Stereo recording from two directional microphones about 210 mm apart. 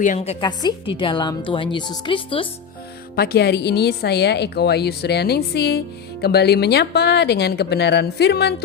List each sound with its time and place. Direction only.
0.0 s a woman's voice: 35° left (ahead or behind)
3.2 s a woman's voice: 50° left (ahead or behind)